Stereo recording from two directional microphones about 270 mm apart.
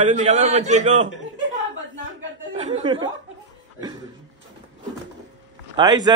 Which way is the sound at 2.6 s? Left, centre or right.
Right.